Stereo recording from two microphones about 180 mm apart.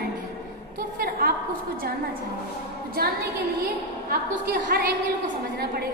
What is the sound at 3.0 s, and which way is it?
Speech, 55° right (ahead or behind).